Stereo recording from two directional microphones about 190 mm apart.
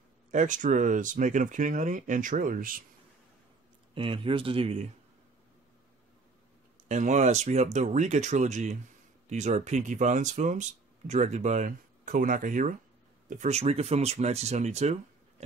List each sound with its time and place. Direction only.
0.3 s speech: 40° right (ahead or behind)
3.9 s speech: 30° right (ahead or behind)
6.9 s speech: 40° right (ahead or behind)